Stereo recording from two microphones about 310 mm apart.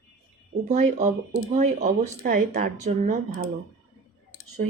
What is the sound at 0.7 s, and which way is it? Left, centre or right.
Speech, right.